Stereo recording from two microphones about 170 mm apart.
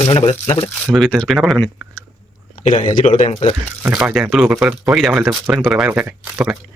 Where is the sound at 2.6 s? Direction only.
45° left (ahead or behind).